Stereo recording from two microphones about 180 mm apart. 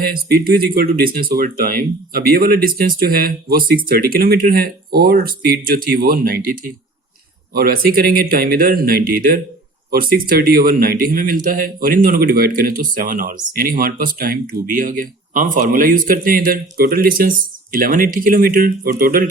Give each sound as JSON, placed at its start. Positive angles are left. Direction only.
{"t": 0.0, "sound": "speech", "side_deg": -55}